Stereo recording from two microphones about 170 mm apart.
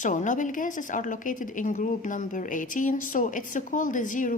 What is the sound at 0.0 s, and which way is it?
A woman's voice, 50° left (ahead or behind).